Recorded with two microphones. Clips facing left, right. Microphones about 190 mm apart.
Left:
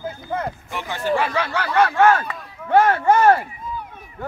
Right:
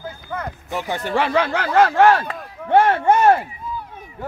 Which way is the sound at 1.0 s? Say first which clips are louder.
Right 1 dB; 60° right (ahead or behind).